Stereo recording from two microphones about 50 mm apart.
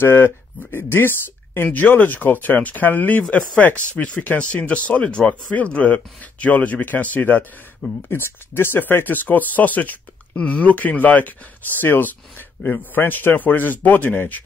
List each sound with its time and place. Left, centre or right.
0.0 s speech: left
8.1 s speech: left
10.3 s speech: left